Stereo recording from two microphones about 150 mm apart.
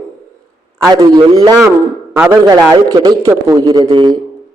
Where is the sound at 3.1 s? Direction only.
20° right (ahead or behind).